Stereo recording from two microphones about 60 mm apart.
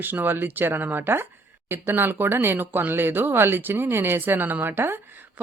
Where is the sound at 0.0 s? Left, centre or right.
Right.